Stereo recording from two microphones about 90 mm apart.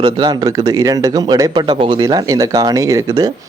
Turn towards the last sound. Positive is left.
turn(degrees=-40)  # may be behind; listen again after turning